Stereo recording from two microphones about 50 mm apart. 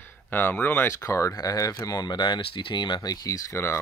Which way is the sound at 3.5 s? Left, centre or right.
Left.